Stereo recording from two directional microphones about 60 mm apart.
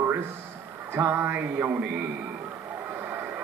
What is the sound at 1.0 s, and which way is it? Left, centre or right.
Speech, right.